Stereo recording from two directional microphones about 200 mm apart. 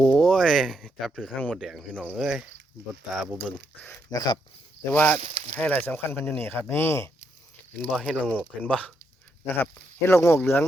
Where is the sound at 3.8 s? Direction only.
15° left (ahead or behind).